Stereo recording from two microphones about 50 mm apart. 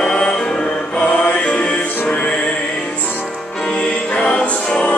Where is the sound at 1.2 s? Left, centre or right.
Left.